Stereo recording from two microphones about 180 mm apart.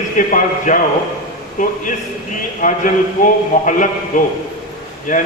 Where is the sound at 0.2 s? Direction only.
45° left (ahead or behind).